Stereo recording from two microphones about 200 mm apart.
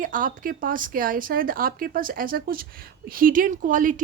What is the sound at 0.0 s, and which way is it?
Speech, 45° right (ahead or behind).